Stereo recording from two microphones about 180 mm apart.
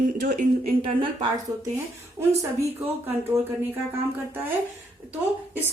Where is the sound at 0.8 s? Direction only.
25° right (ahead or behind).